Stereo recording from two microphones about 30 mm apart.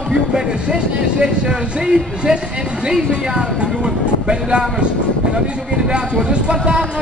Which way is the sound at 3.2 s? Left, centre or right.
Right.